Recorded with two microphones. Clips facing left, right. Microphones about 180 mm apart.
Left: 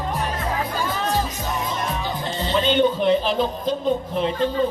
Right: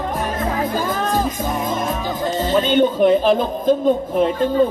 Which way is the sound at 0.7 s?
50° right (ahead or behind).